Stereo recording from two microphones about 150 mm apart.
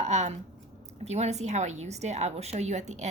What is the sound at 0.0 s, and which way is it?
A woman's voice, 50° right (ahead or behind).